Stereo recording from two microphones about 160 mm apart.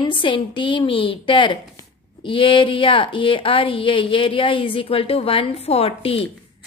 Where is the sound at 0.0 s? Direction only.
30° left (ahead or behind).